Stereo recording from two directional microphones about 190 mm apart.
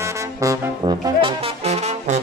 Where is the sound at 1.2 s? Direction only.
30° right (ahead or behind).